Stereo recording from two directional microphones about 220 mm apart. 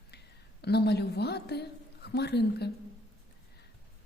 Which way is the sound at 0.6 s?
50° left (ahead or behind).